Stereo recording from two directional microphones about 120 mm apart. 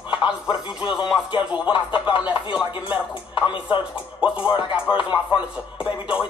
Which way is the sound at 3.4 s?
45° left (ahead or behind).